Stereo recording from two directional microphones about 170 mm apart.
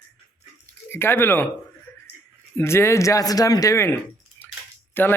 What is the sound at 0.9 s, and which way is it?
Speech, 15° left (ahead or behind).